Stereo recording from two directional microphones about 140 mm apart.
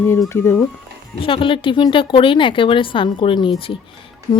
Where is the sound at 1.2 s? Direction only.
40° left (ahead or behind).